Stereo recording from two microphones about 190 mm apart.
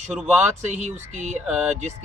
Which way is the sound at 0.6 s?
40° right (ahead or behind).